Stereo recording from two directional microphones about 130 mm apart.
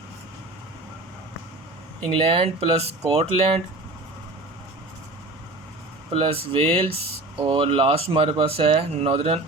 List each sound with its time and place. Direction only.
2.0 s speech: 45° right (ahead or behind)
6.1 s speech: 45° right (ahead or behind)